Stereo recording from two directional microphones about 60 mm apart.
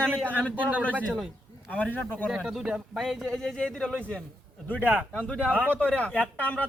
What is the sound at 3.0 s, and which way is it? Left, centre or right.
Speech, centre.